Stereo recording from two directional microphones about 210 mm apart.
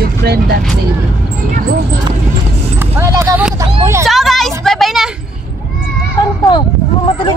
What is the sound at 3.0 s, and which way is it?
Speech, 15° right (ahead or behind).